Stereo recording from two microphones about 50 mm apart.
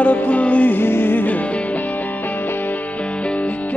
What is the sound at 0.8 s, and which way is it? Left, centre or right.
Music, left.